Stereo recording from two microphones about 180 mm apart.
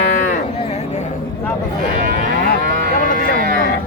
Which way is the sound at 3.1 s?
50° right (ahead or behind).